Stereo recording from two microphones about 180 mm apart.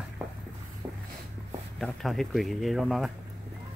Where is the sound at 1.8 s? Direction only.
Centre (ahead or behind).